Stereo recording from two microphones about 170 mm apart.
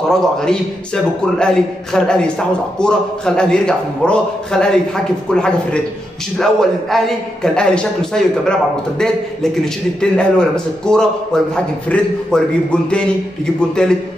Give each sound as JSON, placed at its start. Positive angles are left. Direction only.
{"t": 0.1, "sound": "a man's voice", "side_deg": 5}
{"t": 9.9, "sound": "a man's voice", "side_deg": 5}
{"t": 13.6, "sound": "a man's voice", "side_deg": 5}